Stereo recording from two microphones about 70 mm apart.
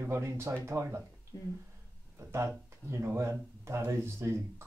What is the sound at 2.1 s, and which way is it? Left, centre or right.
Speech, right.